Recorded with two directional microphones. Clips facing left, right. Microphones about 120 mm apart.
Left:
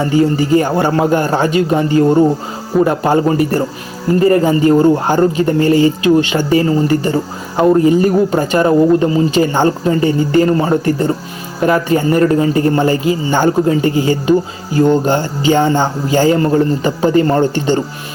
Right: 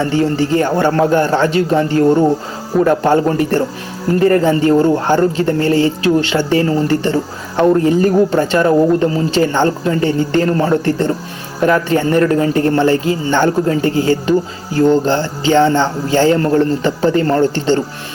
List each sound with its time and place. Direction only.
0.0 s speech: 10° left (ahead or behind)